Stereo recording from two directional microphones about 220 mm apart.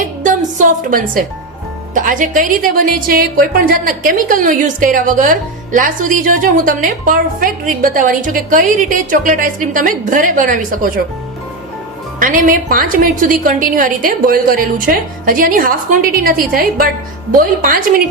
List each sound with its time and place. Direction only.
0.2 s music: 35° right (ahead or behind)
1.9 s a woman's voice: 35° right (ahead or behind)
12.2 s a woman's voice: 40° right (ahead or behind)